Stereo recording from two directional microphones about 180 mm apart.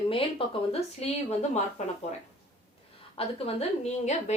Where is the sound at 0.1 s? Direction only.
30° left (ahead or behind).